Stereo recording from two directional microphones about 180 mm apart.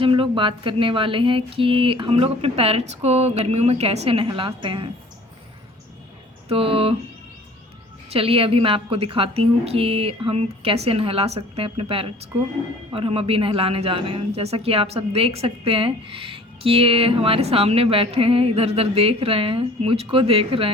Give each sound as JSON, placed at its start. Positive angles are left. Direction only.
{"t": 0.0, "sound": "speech", "side_deg": -30}
{"t": 6.5, "sound": "speech", "side_deg": -30}
{"t": 8.1, "sound": "speech", "side_deg": -30}